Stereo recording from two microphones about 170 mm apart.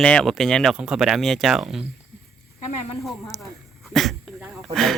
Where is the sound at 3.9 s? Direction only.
Centre (ahead or behind).